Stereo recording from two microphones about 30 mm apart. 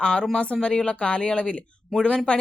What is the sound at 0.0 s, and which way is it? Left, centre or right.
Speech, left.